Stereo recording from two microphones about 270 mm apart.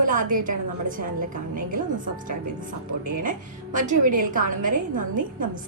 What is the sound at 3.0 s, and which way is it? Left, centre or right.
A woman's voice, right.